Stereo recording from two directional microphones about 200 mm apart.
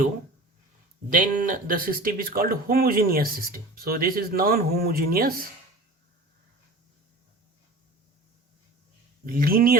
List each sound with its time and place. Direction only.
1.1 s speech: 40° right (ahead or behind)
9.2 s speech: 45° right (ahead or behind)